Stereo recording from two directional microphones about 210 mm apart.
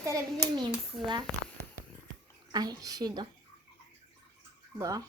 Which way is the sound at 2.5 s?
20° right (ahead or behind).